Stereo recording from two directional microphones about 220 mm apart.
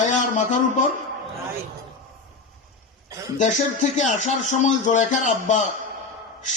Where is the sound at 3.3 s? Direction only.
35° left (ahead or behind).